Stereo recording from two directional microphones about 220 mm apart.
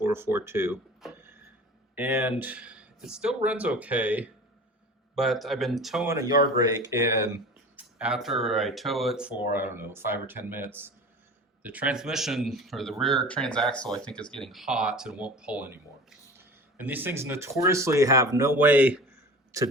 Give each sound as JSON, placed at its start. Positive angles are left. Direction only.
{"t": 0.0, "sound": "speech", "side_deg": -10}
{"t": 1.0, "sound": "a sound", "side_deg": -10}
{"t": 2.0, "sound": "speech", "side_deg": -10}
{"t": 6.1, "sound": "speech", "side_deg": -15}
{"t": 7.8, "sound": "speech", "side_deg": -5}